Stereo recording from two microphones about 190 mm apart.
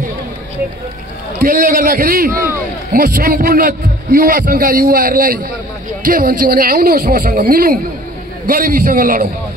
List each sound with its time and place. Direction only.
1.4 s a man's voice: 50° right (ahead or behind)